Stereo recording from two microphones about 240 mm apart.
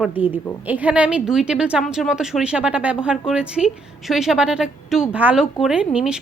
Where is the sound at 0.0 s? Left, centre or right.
Centre.